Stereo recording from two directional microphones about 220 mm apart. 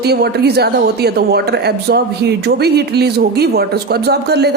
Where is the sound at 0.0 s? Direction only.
45° right (ahead or behind).